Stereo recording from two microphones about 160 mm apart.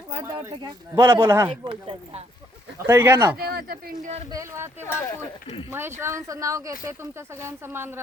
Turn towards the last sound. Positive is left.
turn(degrees=-15)  # may be behind; listen again after turning